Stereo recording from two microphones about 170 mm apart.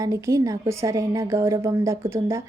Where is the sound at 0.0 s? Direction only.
20° right (ahead or behind).